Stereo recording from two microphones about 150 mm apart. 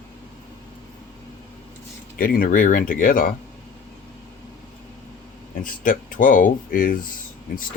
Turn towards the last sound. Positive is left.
turn(degrees=65)  # may be behind; listen again after turning